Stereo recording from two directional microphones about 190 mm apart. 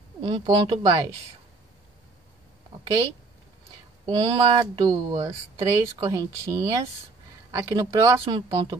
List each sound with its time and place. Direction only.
0.2 s speech: 25° right (ahead or behind)
4.0 s speech: 25° right (ahead or behind)